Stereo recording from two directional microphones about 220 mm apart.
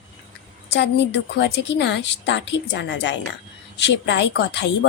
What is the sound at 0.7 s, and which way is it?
A woman's voice, 50° left (ahead or behind).